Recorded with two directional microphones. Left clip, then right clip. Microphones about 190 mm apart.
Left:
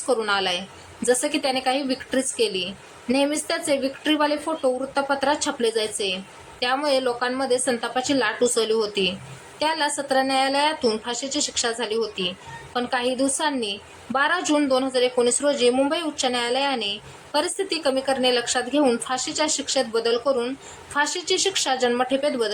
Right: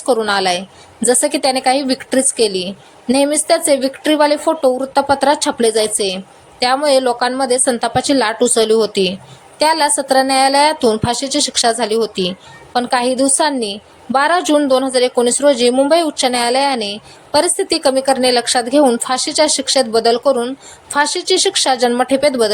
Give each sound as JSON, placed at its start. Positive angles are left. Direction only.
{"t": 0.0, "sound": "a woman's voice", "side_deg": -25}